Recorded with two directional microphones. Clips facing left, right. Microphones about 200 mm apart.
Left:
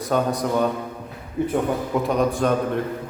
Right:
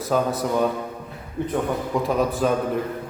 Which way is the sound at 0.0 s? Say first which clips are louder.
Even; 5° right (ahead or behind).